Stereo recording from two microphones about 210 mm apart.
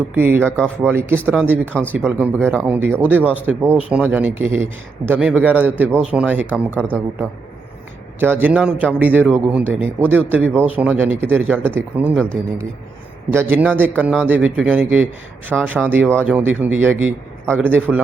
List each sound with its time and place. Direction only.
0.2 s a man's voice: 10° right (ahead or behind)
8.2 s a man's voice: 10° right (ahead or behind)
13.3 s a man's voice: 10° right (ahead or behind)